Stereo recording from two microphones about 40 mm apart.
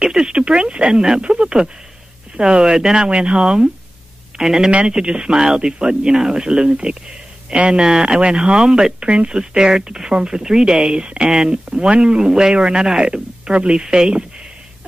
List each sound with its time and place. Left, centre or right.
0.0 s speech: centre
3.1 s speech: right
3.4 s speech: centre
4.6 s speech: right
7.8 s speech: centre
11.0 s speech: right